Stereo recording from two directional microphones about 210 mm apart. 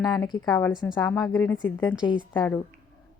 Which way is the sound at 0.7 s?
Centre (ahead or behind).